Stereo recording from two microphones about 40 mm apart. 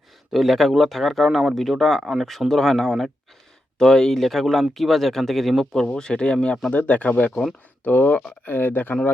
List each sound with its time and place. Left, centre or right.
0.3 s speech: centre
5.9 s speech: left
6.7 s speech: left
7.9 s speech: left